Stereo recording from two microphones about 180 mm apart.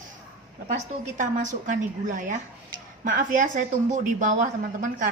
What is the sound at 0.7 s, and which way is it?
Speech, 45° right (ahead or behind).